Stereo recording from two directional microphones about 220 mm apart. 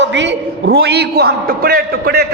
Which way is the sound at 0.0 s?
55° right (ahead or behind).